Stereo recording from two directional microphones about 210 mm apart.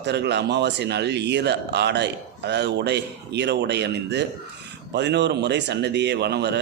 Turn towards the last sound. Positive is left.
turn(degrees=-55)  # may be behind; listen again after turning